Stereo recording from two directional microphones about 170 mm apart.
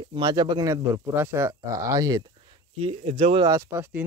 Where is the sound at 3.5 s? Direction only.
15° right (ahead or behind).